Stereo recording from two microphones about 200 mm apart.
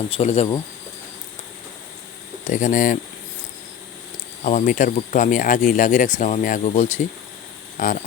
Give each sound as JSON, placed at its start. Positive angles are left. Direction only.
{"t": 0.1, "sound": "speech", "side_deg": 30}
{"t": 2.5, "sound": "speech", "side_deg": 40}
{"t": 4.4, "sound": "speech", "side_deg": 40}